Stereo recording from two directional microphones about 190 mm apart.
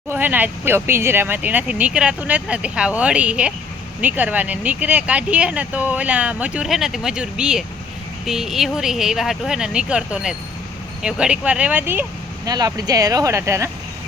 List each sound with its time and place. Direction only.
0.1 s speech: 10° right (ahead or behind)
12.5 s speech: 20° right (ahead or behind)